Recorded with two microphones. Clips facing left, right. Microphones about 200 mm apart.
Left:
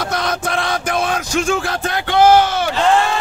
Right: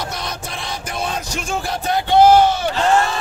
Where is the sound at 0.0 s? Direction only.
90° left.